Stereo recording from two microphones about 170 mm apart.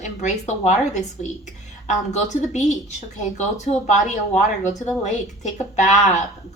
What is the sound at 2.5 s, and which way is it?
A woman's voice, 45° left (ahead or behind).